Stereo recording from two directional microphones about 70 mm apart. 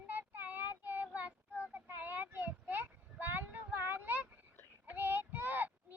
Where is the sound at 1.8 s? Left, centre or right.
Right.